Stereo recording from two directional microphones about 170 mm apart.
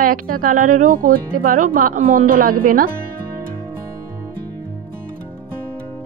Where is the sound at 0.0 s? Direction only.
55° right (ahead or behind).